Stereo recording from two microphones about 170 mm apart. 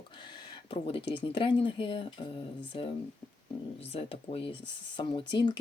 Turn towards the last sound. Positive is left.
turn(degrees=30)  # may be behind; listen again after turning